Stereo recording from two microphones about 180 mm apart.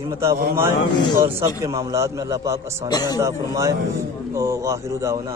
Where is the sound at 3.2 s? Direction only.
15° right (ahead or behind).